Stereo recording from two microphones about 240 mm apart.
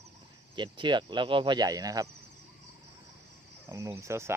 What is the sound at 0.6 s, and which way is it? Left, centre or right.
Speech, centre.